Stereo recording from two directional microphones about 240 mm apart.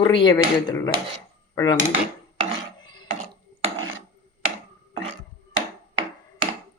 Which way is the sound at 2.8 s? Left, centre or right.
Centre.